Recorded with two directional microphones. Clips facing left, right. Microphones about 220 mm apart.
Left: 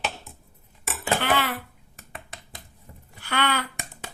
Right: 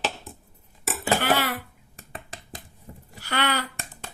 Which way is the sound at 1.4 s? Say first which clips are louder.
Right 1 dB; 40° right (ahead or behind).